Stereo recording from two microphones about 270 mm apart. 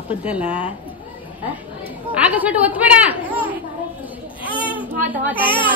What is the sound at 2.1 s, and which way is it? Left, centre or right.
A woman's voice, centre.